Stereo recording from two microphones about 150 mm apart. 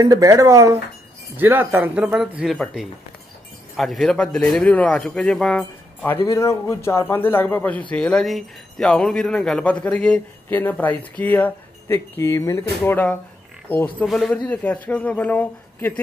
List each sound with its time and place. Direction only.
0.0 s speech: 20° right (ahead or behind); by 6.1 s 5° left (ahead or behind)
6.2 s speech: 20° left (ahead or behind)